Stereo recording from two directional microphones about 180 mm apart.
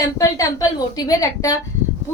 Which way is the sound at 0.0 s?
20° left (ahead or behind).